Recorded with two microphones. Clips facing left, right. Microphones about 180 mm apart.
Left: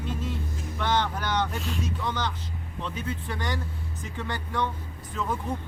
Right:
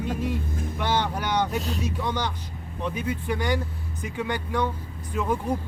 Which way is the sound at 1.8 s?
10° right (ahead or behind).